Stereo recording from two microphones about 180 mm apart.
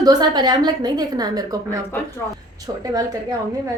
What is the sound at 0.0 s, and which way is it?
A woman's voice, 20° right (ahead or behind).